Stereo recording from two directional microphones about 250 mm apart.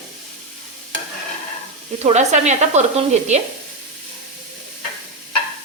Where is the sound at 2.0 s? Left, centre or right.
Right.